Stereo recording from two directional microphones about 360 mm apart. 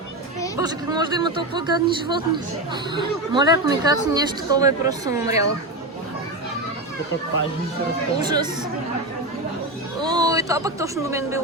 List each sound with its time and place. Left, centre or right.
0.5 s speech: centre
8.2 s speech: centre
10.0 s speech: centre